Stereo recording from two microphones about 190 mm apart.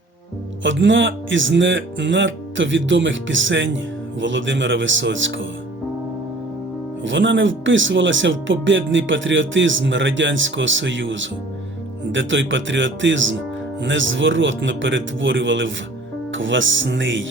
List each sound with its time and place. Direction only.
0.6 s speech: 75° right (ahead or behind)
7.0 s speech: 75° right (ahead or behind)